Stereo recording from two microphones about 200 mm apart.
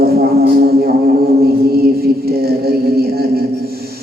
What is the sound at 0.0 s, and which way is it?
Music, 50° right (ahead or behind).